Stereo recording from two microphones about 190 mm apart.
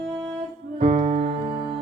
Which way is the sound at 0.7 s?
40° right (ahead or behind).